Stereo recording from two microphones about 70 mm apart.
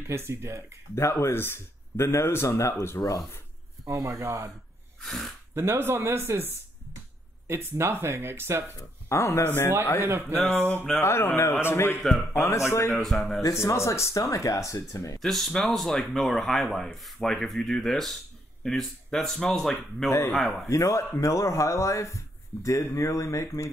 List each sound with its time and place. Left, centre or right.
0.1 s speech: right
0.9 s speech: left
3.8 s speech: right
5.0 s speech: centre
5.5 s speech: right
7.4 s speech: right
9.1 s speech: left
10.0 s speech: right
11.0 s speech: left
13.0 s speech: centre
13.4 s speech: left
15.2 s speech: centre
20.7 s speech: left